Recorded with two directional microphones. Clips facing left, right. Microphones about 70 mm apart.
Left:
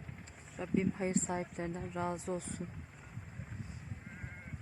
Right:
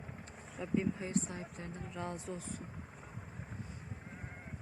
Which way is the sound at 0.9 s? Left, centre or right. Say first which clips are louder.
Left 3 dB; left.